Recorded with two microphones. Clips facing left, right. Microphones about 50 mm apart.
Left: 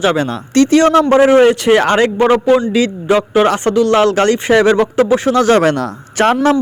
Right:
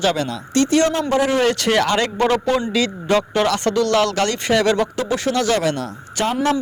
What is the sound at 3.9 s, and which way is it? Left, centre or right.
Speech, left.